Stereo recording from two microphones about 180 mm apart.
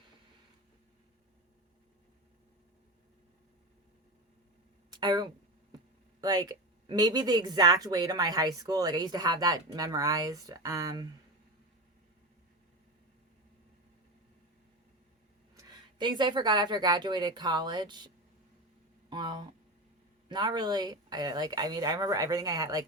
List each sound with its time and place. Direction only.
4.9 s speech: 25° right (ahead or behind)
15.5 s speech: 25° right (ahead or behind)
19.1 s speech: 25° right (ahead or behind)